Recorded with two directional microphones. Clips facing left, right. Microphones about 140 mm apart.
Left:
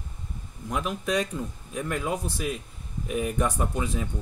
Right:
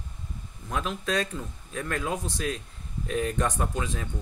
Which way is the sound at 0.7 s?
15° left (ahead or behind).